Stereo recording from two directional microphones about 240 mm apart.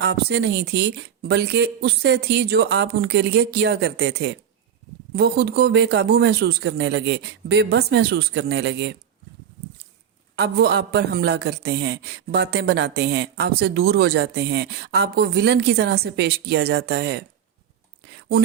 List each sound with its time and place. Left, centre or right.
0.0 s a man's voice: right
10.3 s a man's voice: right